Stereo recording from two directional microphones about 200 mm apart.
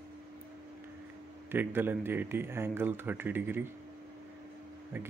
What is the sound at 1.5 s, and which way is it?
Speech, 10° right (ahead or behind).